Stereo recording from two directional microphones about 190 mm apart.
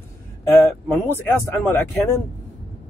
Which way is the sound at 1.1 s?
10° left (ahead or behind).